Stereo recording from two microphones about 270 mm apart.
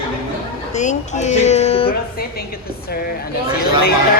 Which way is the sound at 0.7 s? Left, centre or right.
Left.